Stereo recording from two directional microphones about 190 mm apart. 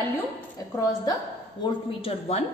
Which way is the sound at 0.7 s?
20° left (ahead or behind).